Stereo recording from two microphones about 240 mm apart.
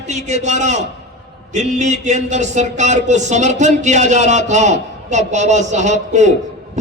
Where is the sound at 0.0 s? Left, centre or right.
Right.